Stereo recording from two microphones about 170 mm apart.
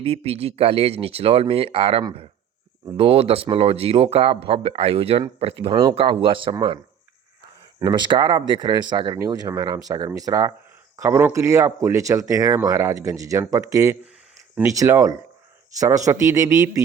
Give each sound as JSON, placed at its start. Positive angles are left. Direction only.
{"t": 0.0, "sound": "speech", "side_deg": -35}
{"t": 7.8, "sound": "speech", "side_deg": -25}